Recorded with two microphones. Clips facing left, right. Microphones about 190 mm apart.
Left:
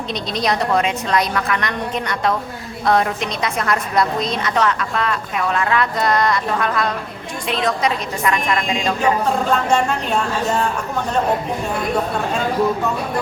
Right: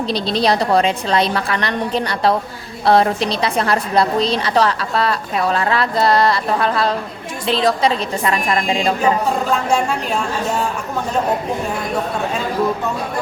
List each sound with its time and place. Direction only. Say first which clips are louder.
0.1 s a woman's voice: right 3 dB; 30° right (ahead or behind)
9.5 s speech: even; 5° right (ahead or behind)